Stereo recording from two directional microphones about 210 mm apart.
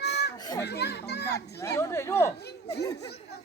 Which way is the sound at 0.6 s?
50° left (ahead or behind).